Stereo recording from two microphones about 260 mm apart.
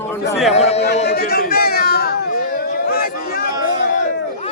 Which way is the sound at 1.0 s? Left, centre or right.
Left.